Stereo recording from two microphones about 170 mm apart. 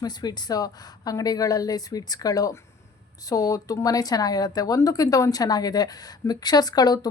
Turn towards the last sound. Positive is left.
turn(degrees=25)  # may be behind; listen again after turning